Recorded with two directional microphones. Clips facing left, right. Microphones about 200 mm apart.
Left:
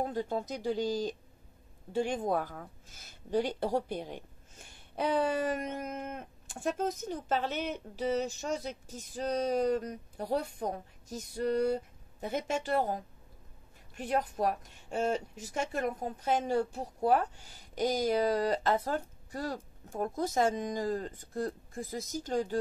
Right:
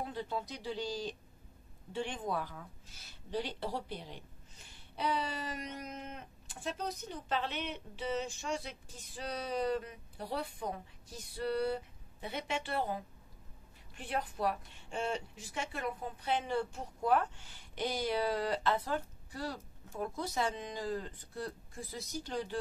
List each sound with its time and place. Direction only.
0.0 s speech: 45° left (ahead or behind)